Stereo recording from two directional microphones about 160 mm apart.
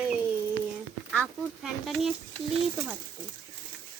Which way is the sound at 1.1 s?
5° left (ahead or behind).